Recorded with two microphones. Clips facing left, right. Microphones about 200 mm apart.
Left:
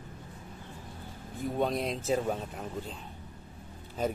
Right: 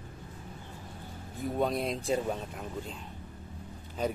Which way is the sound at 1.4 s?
Centre (ahead or behind).